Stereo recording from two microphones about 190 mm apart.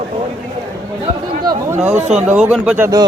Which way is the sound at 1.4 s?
20° right (ahead or behind).